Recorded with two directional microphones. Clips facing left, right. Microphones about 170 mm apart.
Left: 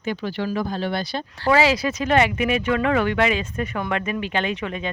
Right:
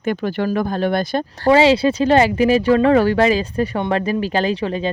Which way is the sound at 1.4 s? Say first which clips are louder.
Right 6 dB; 30° right (ahead or behind).